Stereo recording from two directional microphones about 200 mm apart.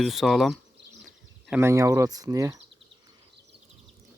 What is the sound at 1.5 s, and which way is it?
Speech, 15° right (ahead or behind).